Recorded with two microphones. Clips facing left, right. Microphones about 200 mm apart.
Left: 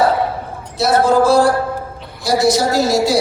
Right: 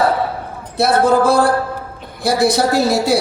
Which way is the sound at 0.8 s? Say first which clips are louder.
Even; 55° right (ahead or behind).